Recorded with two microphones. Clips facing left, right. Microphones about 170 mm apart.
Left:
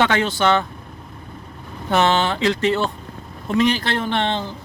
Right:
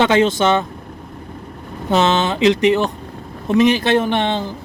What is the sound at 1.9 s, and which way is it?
Speech, 20° right (ahead or behind).